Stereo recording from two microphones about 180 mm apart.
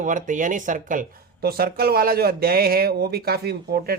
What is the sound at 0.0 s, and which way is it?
Speech, 45° right (ahead or behind).